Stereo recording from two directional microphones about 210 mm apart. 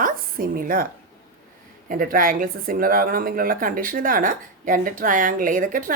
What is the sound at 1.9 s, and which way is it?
Speech, 40° right (ahead or behind).